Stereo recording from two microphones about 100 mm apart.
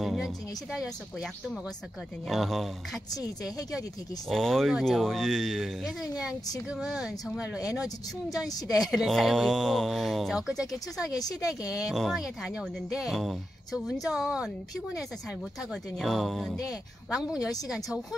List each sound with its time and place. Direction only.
0.0 s speech: centre (ahead or behind)
3.1 s a woman's voice: 40° left (ahead or behind)
4.3 s speech: 5° left (ahead or behind)
8.3 s a woman's voice: 40° left (ahead or behind)
8.9 s speech: centre (ahead or behind)
11.1 s a woman's voice: 40° left (ahead or behind)
11.9 s a woman's voice: centre (ahead or behind)